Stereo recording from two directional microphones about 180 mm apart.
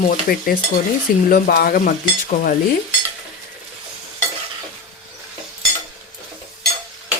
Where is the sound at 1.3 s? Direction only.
55° left (ahead or behind).